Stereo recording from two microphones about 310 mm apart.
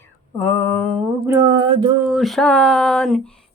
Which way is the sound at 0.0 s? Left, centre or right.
Centre.